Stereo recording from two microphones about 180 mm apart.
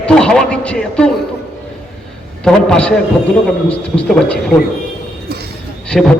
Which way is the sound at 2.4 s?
5° left (ahead or behind).